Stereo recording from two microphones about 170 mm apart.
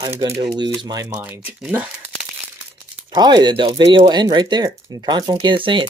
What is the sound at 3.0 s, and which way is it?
Speech, 25° right (ahead or behind).